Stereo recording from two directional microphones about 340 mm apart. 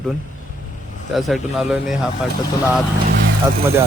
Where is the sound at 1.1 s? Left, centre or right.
Centre.